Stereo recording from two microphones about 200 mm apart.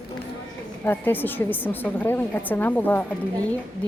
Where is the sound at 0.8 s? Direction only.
10° left (ahead or behind).